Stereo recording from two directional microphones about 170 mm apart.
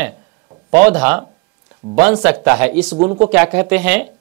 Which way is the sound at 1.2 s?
30° right (ahead or behind).